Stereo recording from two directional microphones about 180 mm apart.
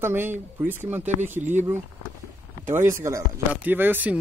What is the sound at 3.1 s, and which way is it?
Speech, 15° right (ahead or behind).